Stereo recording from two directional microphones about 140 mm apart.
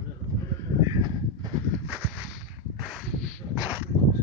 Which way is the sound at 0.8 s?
30° right (ahead or behind).